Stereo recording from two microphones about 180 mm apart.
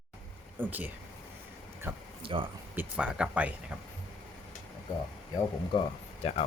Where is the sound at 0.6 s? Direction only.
10° right (ahead or behind).